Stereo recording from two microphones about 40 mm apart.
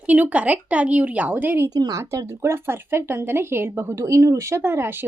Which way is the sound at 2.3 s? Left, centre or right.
Right.